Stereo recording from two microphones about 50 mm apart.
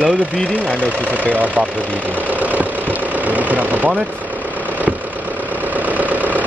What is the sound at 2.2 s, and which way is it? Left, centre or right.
Engine, right.